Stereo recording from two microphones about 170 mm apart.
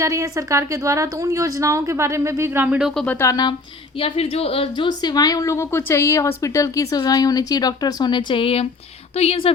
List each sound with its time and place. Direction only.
0.0 s a woman's voice: 20° right (ahead or behind); by 3.5 s 20° left (ahead or behind)
4.0 s a woman's voice: 35° left (ahead or behind)